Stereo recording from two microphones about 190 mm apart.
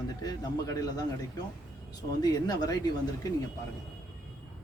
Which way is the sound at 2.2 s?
20° left (ahead or behind).